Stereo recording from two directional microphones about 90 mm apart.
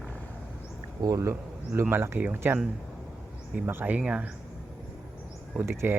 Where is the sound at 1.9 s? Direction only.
25° right (ahead or behind).